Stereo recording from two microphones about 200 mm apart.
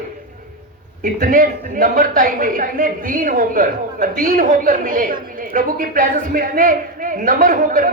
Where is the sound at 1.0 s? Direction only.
45° right (ahead or behind).